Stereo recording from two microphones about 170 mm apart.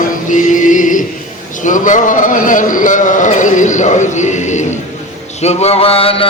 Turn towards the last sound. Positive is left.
turn(degrees=35)  # may be behind; listen again after turning